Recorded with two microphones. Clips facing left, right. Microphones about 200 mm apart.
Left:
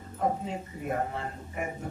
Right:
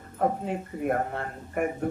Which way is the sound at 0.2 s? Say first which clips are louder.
Right 3 dB; 60° right (ahead or behind).